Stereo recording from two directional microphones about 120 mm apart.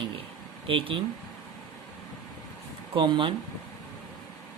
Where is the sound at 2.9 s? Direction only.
45° right (ahead or behind).